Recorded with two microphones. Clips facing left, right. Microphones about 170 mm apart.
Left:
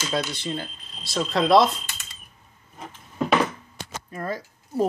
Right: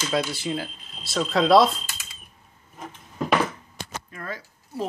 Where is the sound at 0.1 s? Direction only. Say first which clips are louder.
Right 2 dB; 5° right (ahead or behind).